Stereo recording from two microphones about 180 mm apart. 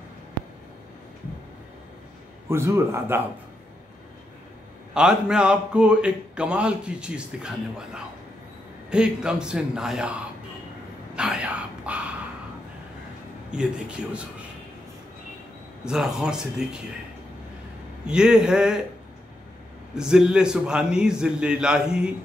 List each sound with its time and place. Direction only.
2.5 s a man's voice: 15° right (ahead or behind)
4.9 s a man's voice: 5° right (ahead or behind)
11.1 s a sound: 5° right (ahead or behind)
13.5 s a man's voice: 5° right (ahead or behind)
15.8 s a man's voice: 5° right (ahead or behind)
18.0 s a man's voice: 5° right (ahead or behind)
19.9 s a man's voice: 5° right (ahead or behind)